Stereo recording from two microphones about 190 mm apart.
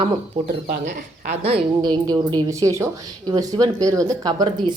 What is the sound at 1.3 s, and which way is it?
Speech, 30° right (ahead or behind).